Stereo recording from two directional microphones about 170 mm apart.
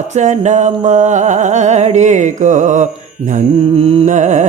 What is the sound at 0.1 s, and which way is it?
Music, 45° right (ahead or behind).